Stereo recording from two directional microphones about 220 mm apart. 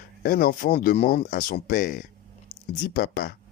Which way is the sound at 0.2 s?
45° left (ahead or behind).